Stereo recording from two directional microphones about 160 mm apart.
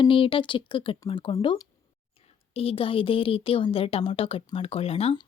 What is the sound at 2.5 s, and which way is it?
Speech, 35° left (ahead or behind).